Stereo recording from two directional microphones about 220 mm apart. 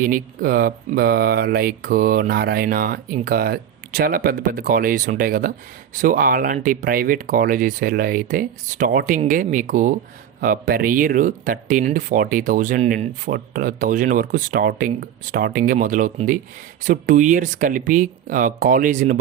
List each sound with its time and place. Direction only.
0.0 s speech: 40° right (ahead or behind)